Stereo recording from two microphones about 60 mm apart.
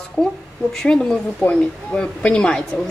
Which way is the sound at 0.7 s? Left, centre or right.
Centre.